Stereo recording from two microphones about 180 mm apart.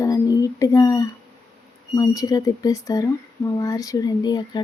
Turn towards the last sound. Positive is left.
turn(degrees=25)  # may be behind; listen again after turning